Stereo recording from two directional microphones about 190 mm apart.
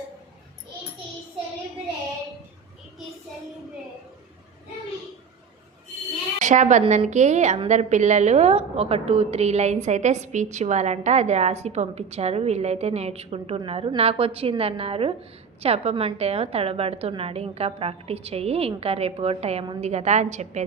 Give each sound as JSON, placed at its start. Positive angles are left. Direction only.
{"t": 6.4, "sound": "a woman's voice", "side_deg": -40}